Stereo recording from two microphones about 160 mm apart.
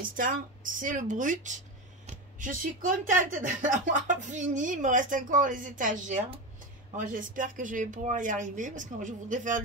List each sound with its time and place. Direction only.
0.1 s speech: 60° right (ahead or behind)